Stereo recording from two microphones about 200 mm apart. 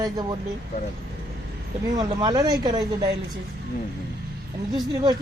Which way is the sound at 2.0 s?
20° right (ahead or behind).